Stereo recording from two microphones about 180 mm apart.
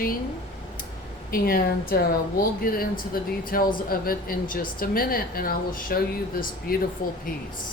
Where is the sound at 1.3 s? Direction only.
55° left (ahead or behind).